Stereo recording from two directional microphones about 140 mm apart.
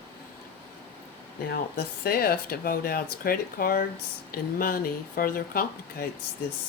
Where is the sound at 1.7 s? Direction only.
90° left.